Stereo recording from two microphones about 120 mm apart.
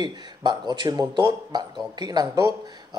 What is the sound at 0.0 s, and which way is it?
Speech, 35° right (ahead or behind).